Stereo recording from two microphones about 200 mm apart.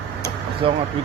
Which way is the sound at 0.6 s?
25° right (ahead or behind).